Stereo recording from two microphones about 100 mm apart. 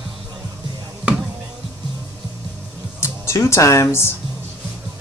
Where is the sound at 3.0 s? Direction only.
25° left (ahead or behind).